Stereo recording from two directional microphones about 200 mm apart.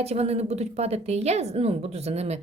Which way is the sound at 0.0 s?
30° right (ahead or behind).